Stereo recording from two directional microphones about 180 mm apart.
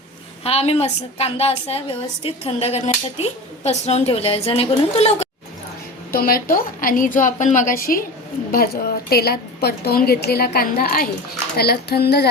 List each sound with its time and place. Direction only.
0.4 s a woman's voice: 35° left (ahead or behind)
6.1 s a woman's voice: 55° left (ahead or behind)